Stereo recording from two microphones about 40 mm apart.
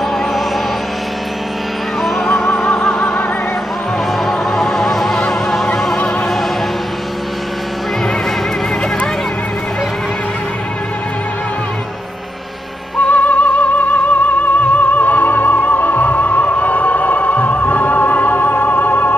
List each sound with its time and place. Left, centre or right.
2.2 s music: left
4.3 s music: centre
13.1 s music: left